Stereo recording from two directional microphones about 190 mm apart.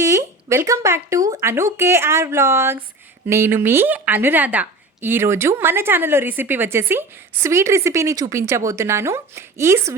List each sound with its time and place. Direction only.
0.0 s a woman's voice: 20° right (ahead or behind)